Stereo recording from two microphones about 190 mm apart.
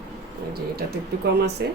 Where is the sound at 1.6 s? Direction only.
60° right (ahead or behind).